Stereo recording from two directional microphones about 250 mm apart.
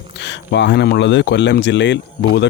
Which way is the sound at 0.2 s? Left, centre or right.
Left.